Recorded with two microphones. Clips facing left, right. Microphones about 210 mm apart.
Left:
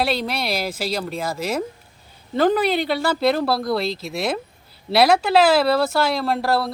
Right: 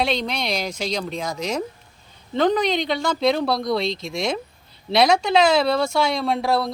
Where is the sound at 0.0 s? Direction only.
5° left (ahead or behind).